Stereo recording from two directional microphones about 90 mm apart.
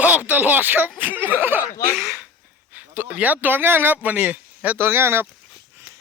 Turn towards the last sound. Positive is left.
turn(degrees=-25)  # may be behind; listen again after turning